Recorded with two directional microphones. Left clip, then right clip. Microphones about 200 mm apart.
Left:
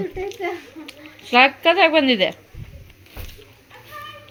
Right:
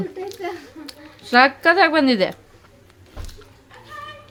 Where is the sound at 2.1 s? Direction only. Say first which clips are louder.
Left 1 dB; 55° right (ahead or behind).